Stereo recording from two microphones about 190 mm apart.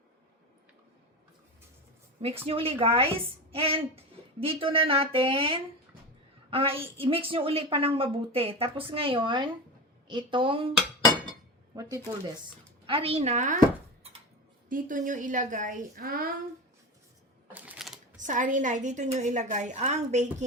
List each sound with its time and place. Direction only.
2.5 s a woman's voice: 30° right (ahead or behind)
11.7 s speech: 20° right (ahead or behind)
12.8 s a woman's voice: 30° right (ahead or behind)
14.7 s a woman's voice: 45° right (ahead or behind)
17.5 s typewriter: 5° right (ahead or behind)
18.2 s a woman's voice: 40° right (ahead or behind)